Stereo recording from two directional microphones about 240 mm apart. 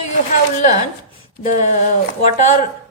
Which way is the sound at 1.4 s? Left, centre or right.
Left.